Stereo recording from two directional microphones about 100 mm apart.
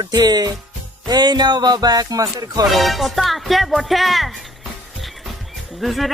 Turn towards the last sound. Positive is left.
turn(degrees=0)  # may be behind; listen again after turning